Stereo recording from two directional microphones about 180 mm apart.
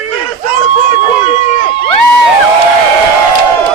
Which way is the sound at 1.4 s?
45° left (ahead or behind).